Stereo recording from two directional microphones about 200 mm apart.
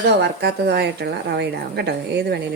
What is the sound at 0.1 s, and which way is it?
A woman's voice, 55° right (ahead or behind).